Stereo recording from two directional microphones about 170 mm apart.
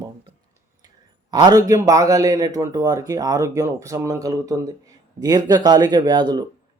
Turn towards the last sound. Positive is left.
turn(degrees=-25)  # may be behind; listen again after turning